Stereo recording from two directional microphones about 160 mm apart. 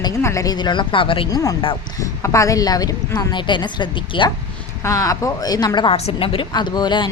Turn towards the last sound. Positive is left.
turn(degrees=30)  # may be behind; listen again after turning